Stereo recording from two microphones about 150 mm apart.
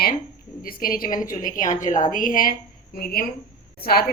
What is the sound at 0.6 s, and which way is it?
A woman's voice, 75° left (ahead or behind).